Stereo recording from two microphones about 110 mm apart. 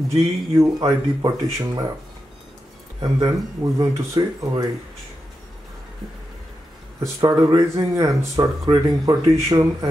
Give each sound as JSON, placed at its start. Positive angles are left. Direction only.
{"t": 0.1, "sound": "speech", "side_deg": -30}
{"t": 3.0, "sound": "speech", "side_deg": -35}
{"t": 7.2, "sound": "speech", "side_deg": -40}